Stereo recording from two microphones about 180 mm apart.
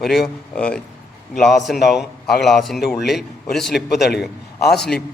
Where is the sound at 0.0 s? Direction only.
Centre (ahead or behind).